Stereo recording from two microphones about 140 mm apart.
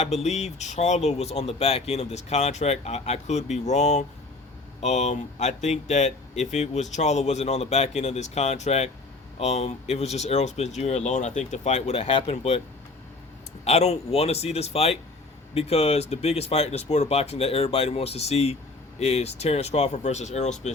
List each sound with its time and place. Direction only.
0.0 s speech: 50° left (ahead or behind)
13.7 s speech: 50° left (ahead or behind)